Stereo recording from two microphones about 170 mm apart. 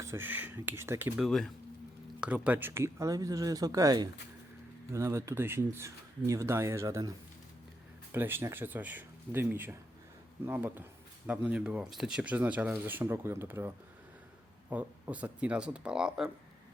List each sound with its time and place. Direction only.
0.0 s speech: 15° right (ahead or behind)
1.2 s speech: centre (ahead or behind); by 7.1 s 20° right (ahead or behind)
8.1 s speech: 15° right (ahead or behind)